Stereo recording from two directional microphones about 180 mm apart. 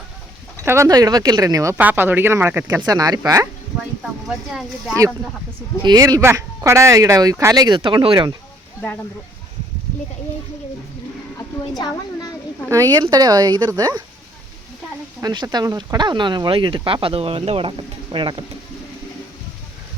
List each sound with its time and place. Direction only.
0.6 s speech: 15° right (ahead or behind)
4.3 s speech: 5° right (ahead or behind)
5.8 s speech: 20° right (ahead or behind)
8.8 s speech: 10° left (ahead or behind)
11.8 s a sound: 20° left (ahead or behind)
12.6 s speech: 15° right (ahead or behind)
15.2 s speech: 25° right (ahead or behind)